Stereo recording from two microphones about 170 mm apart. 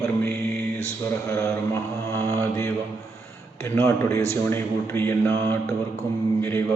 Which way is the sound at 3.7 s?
15° left (ahead or behind).